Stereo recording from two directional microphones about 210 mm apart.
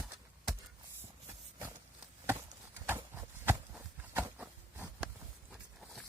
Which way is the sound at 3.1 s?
10° right (ahead or behind).